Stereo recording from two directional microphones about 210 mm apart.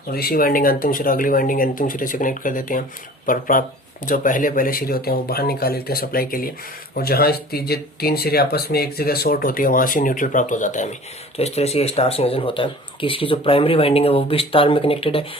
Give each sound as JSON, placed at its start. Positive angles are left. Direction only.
{"t": 0.1, "sound": "speech", "side_deg": 45}